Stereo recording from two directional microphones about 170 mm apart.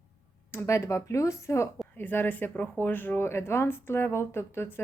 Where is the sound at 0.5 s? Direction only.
15° left (ahead or behind).